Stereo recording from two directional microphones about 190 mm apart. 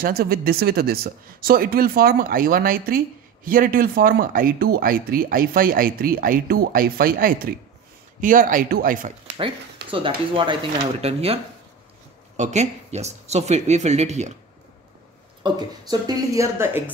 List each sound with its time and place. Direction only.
0.0 s speech: 50° right (ahead or behind)
9.8 s speech: 25° right (ahead or behind)
12.4 s speech: 35° right (ahead or behind)
15.4 s speech: 20° right (ahead or behind)